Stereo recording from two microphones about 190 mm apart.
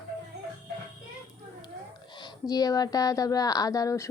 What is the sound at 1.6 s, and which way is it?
Speech, 25° left (ahead or behind).